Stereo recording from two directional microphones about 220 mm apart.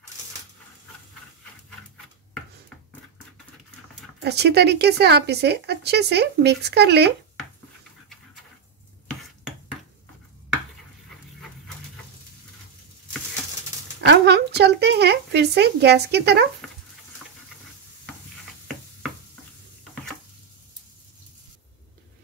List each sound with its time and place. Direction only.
4.2 s speech: 50° right (ahead or behind)
14.0 s speech: 50° right (ahead or behind)